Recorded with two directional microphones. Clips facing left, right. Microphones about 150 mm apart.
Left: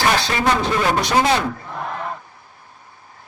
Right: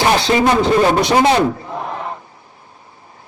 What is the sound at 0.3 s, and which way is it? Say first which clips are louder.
Speech: right 6 dB; 25° right (ahead or behind).